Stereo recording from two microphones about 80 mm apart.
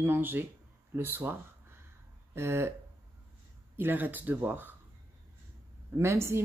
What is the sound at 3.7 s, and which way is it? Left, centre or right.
A woman's voice, right.